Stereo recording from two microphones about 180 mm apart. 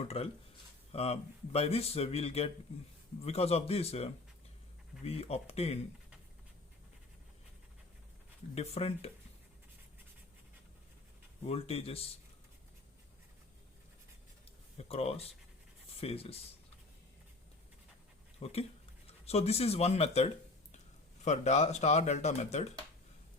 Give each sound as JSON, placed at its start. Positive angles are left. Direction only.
{"t": 0.0, "sound": "speech", "side_deg": 35}
{"t": 8.5, "sound": "speech", "side_deg": 35}
{"t": 11.4, "sound": "speech", "side_deg": 35}
{"t": 14.8, "sound": "speech", "side_deg": 35}
{"t": 18.3, "sound": "speech", "side_deg": 35}